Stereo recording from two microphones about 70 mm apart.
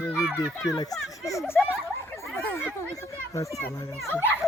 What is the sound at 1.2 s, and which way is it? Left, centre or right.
Speech, left.